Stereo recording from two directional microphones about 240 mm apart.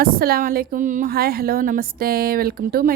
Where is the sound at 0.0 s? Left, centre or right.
Right.